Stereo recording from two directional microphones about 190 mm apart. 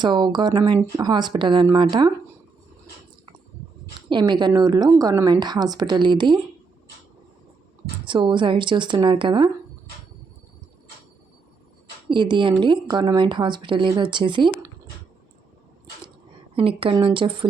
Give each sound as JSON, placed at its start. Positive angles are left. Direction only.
{"t": 0.0, "sound": "a woman's voice", "side_deg": -25}
{"t": 4.1, "sound": "a woman's voice", "side_deg": -25}
{"t": 8.0, "sound": "a woman's voice", "side_deg": -25}
{"t": 12.0, "sound": "a woman's voice", "side_deg": -25}
{"t": 16.6, "sound": "a woman's voice", "side_deg": -30}